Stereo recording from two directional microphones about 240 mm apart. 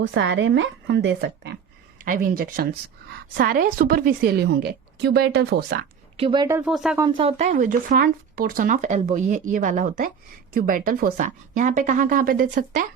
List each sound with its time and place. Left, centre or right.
0.0 s a woman's voice: right
2.0 s speech: right
6.1 s speech: right; by 7.0 s centre
7.0 s speech: right